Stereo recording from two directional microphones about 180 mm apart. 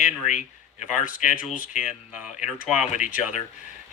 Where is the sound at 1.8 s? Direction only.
5° right (ahead or behind).